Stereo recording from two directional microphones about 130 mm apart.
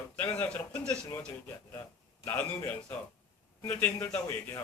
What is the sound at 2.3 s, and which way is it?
A man's voice, 15° left (ahead or behind).